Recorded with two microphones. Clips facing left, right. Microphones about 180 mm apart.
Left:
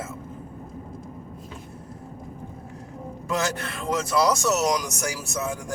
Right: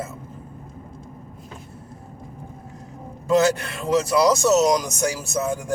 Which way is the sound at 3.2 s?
25° right (ahead or behind).